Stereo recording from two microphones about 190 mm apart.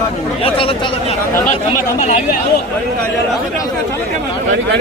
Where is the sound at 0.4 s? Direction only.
30° left (ahead or behind).